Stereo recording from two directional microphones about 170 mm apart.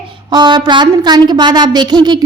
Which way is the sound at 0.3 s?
25° right (ahead or behind).